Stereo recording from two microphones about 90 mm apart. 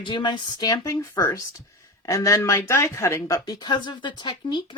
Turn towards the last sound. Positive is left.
turn(degrees=55)  # may be behind; listen again after turning